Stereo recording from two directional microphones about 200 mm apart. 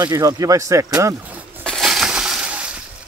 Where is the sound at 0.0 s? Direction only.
15° right (ahead or behind).